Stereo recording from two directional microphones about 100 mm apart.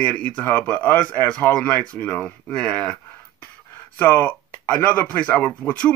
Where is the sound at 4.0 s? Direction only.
15° left (ahead or behind).